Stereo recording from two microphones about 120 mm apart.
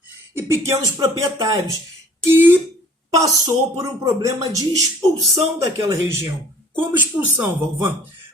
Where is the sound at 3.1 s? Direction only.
25° right (ahead or behind).